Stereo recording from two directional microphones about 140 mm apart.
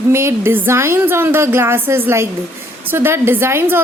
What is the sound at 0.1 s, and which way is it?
A woman's voice, 20° right (ahead or behind).